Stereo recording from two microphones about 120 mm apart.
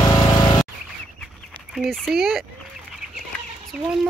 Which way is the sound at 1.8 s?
5° right (ahead or behind).